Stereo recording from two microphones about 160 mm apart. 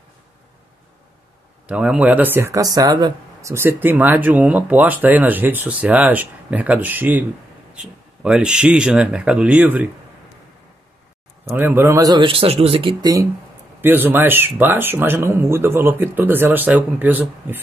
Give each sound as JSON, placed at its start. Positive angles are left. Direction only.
{"t": 1.7, "sound": "speech", "side_deg": -5}
{"t": 11.4, "sound": "speech", "side_deg": -15}
{"t": 13.0, "sound": "speech", "side_deg": -20}